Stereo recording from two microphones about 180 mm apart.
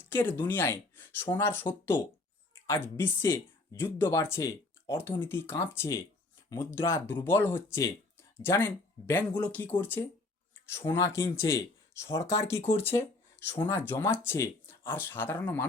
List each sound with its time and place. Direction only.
0.0 s speech: 15° left (ahead or behind)